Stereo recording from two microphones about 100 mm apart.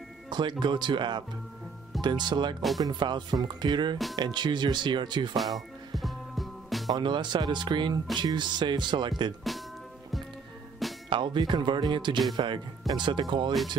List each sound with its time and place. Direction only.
0.3 s speech: 50° right (ahead or behind)
5.4 s music: centre (ahead or behind)
6.9 s speech: 50° right (ahead or behind)
11.1 s speech: 55° right (ahead or behind)